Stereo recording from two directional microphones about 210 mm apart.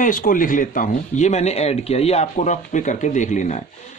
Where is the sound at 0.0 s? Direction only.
40° left (ahead or behind).